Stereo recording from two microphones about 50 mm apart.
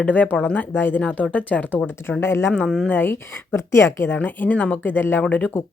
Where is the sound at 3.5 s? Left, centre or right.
Left.